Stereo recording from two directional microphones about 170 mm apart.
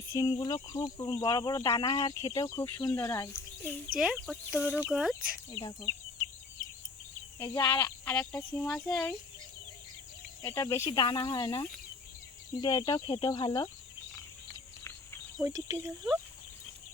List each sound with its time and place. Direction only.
0.1 s speech: 25° left (ahead or behind)
3.9 s speech: 5° right (ahead or behind)
5.5 s speech: 25° left (ahead or behind)
7.3 s speech: 15° left (ahead or behind)
10.4 s speech: 15° left (ahead or behind)
15.4 s speech: 20° right (ahead or behind)